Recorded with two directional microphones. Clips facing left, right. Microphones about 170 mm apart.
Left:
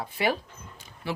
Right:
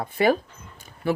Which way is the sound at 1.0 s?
50° right (ahead or behind).